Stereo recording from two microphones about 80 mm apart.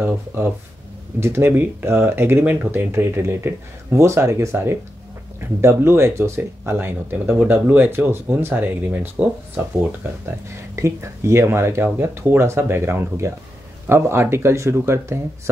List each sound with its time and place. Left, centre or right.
0.0 s a sound: right
1.2 s speech: right
10.8 s speech: right